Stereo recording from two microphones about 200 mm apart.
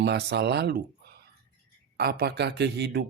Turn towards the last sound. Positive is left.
turn(degrees=-55)  # may be behind; listen again after turning